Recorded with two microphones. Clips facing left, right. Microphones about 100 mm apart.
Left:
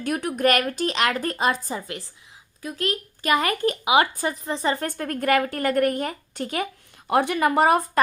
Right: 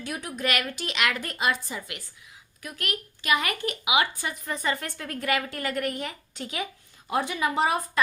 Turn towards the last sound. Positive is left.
turn(degrees=50)  # may be behind; listen again after turning